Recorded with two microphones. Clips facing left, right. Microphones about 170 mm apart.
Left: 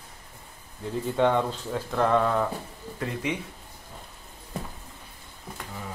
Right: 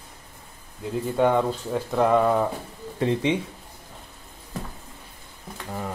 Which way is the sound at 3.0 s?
25° right (ahead or behind).